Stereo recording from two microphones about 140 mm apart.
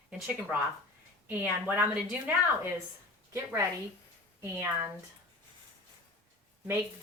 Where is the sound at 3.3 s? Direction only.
20° right (ahead or behind).